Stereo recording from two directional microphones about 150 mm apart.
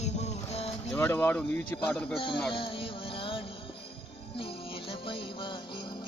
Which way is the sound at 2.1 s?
35° left (ahead or behind).